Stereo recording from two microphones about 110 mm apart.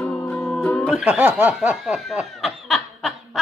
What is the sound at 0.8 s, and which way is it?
Speech, 10° right (ahead or behind).